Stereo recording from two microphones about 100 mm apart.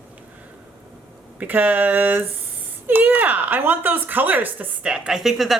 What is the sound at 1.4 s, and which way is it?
Speech, 15° right (ahead or behind).